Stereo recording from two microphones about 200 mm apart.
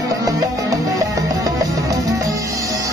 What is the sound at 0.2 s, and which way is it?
Music, 15° right (ahead or behind).